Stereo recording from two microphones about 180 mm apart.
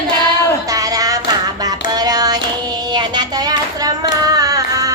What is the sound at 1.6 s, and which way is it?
Child singing, 20° right (ahead or behind).